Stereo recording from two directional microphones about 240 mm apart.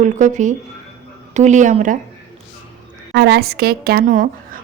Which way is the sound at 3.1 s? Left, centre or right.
Right.